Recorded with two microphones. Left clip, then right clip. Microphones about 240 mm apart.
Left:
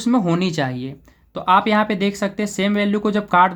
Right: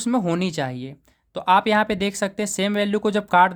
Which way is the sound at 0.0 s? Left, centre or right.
Right.